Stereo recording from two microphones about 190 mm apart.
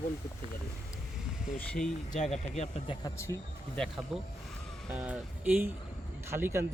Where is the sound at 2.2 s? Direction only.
35° left (ahead or behind).